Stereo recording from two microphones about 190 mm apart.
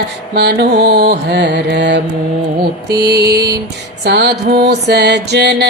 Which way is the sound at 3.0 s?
60° right (ahead or behind).